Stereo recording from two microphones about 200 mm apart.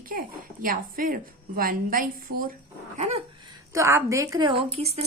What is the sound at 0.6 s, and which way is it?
Speech, 45° right (ahead or behind).